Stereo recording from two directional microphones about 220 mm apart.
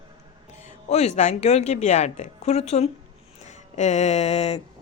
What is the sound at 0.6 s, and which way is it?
Speech, 30° left (ahead or behind).